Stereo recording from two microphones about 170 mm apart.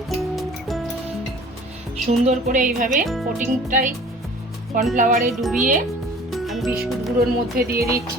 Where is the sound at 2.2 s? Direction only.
50° right (ahead or behind).